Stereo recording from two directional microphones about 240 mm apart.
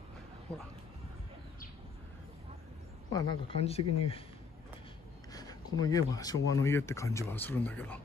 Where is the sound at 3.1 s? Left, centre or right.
Centre.